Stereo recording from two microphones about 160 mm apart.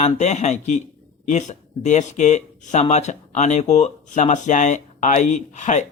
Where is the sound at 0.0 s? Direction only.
45° left (ahead or behind).